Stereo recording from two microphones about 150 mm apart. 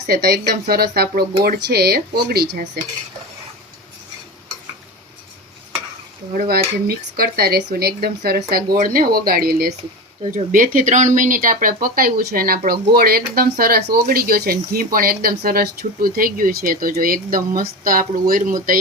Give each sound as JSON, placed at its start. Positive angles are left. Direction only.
{"t": 0.0, "sound": "speech", "side_deg": -90}
{"t": 6.3, "sound": "speech", "side_deg": -90}
{"t": 10.3, "sound": "speech", "side_deg": -65}